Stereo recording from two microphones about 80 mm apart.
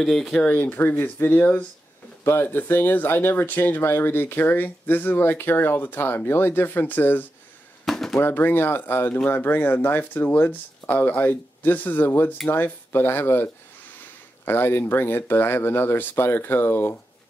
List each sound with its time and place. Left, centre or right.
0.0 s speech: centre
0.6 s speech: left
7.8 s a sound: centre
8.2 s speech: left